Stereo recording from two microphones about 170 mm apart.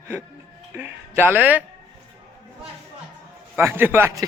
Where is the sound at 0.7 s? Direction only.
10° right (ahead or behind).